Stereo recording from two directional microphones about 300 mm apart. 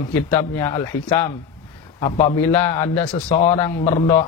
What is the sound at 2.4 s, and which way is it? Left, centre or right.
A man's voice, centre.